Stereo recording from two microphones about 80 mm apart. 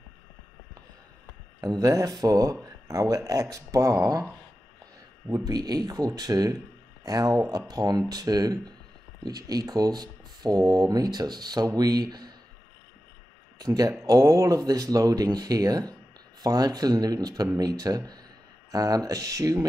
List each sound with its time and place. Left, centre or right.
1.6 s speech: right
5.4 s speech: right
13.6 s speech: right